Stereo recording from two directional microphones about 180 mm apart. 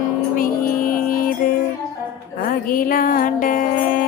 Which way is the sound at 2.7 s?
50° left (ahead or behind).